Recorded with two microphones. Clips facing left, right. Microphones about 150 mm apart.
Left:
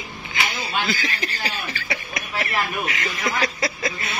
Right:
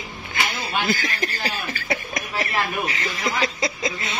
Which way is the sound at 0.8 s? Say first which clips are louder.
Right 2 dB; 45° right (ahead or behind).